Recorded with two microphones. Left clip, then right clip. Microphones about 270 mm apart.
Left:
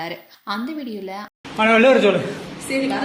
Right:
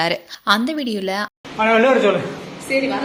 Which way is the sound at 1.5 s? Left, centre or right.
Left.